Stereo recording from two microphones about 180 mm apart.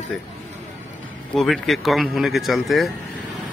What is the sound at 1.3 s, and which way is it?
Speech, centre (ahead or behind).